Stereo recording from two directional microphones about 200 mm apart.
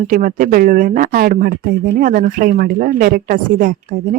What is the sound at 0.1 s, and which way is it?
A woman's voice, 40° right (ahead or behind).